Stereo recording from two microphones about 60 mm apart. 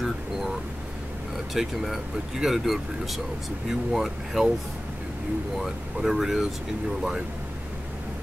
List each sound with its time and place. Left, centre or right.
0.0 s a sound: centre
1.3 s speech: centre
5.6 s speech: centre